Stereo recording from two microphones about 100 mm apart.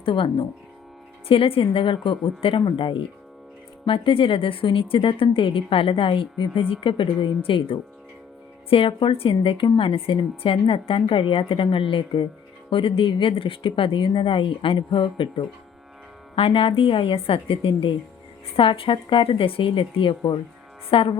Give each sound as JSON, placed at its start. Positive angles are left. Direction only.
{"t": 0.0, "sound": "a woman's voice", "side_deg": 60}
{"t": 16.3, "sound": "a woman's voice", "side_deg": 65}